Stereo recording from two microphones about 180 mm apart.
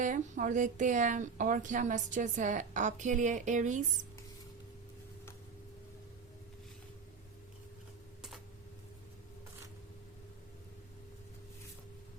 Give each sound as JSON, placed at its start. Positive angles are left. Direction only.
{"t": 0.0, "sound": "a woman's voice", "side_deg": -45}